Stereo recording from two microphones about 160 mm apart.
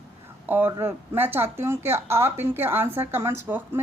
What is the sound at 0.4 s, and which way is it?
Speech, 10° right (ahead or behind).